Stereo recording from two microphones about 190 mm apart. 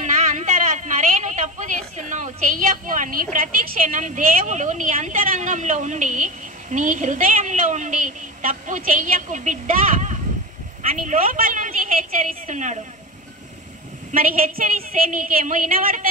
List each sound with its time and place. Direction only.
0.0 s a sound: 40° right (ahead or behind)
2.0 s a woman's voice: 40° right (ahead or behind)
14.1 s a woman's voice: 45° right (ahead or behind)